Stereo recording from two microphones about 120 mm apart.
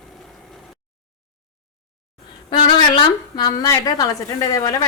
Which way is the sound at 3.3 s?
30° left (ahead or behind).